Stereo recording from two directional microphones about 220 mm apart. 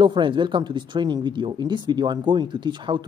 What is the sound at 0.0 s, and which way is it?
Speech, 20° right (ahead or behind).